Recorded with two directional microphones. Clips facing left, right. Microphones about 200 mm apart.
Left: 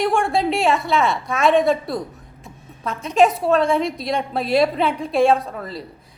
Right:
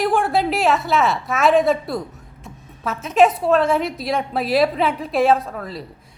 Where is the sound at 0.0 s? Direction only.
Centre (ahead or behind).